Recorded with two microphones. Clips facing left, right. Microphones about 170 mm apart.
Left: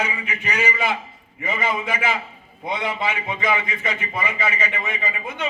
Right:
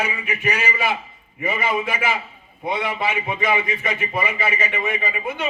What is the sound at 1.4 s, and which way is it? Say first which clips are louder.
Speech: right 2 dB; 20° right (ahead or behind).